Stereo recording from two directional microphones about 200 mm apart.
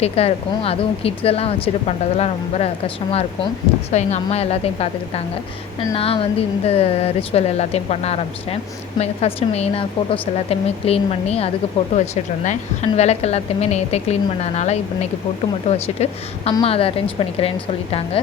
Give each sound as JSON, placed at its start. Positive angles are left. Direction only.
{"t": 0.0, "sound": "a woman's voice", "side_deg": 30}